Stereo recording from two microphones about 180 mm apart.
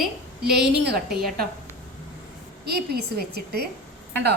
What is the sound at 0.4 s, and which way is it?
Speech, 65° right (ahead or behind).